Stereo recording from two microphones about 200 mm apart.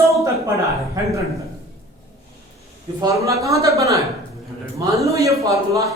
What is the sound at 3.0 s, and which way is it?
A man's voice, 15° right (ahead or behind).